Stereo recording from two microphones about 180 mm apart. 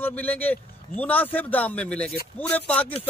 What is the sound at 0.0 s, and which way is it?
Speech, 10° left (ahead or behind).